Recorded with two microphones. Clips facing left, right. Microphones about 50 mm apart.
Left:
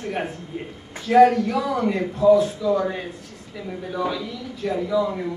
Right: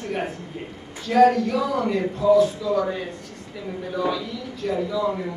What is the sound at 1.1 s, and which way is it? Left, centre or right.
Speech, centre.